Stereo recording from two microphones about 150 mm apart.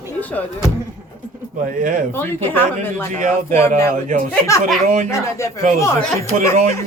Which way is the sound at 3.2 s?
50° right (ahead or behind).